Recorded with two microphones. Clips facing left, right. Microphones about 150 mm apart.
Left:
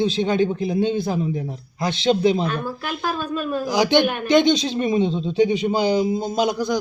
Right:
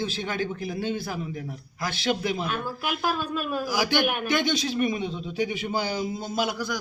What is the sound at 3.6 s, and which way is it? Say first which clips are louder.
Speech: left 9 dB; 20° left (ahead or behind).